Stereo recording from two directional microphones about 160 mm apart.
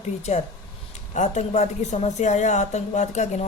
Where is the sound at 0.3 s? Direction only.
45° left (ahead or behind).